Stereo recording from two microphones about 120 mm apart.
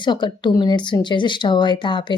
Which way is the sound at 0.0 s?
40° left (ahead or behind).